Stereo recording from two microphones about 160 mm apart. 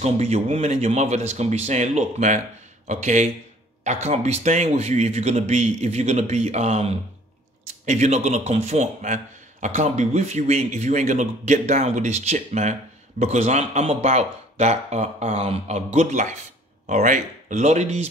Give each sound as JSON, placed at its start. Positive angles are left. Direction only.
{"t": 0.0, "sound": "a man's voice", "side_deg": -40}